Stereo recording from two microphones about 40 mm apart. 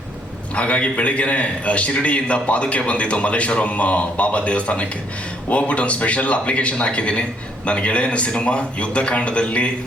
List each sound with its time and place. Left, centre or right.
0.5 s a man's voice: left